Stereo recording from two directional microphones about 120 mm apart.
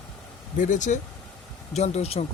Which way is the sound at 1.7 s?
65° left (ahead or behind).